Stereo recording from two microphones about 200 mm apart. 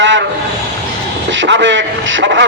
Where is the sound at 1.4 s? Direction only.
65° right (ahead or behind).